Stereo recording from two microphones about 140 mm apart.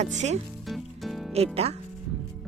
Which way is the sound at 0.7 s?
Centre (ahead or behind).